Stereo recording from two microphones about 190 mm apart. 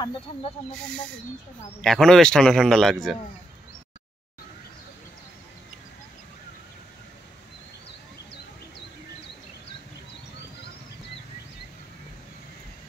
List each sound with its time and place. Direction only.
1.8 s a man's voice: centre (ahead or behind)